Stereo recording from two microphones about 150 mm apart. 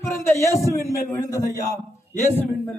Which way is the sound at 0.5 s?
20° left (ahead or behind).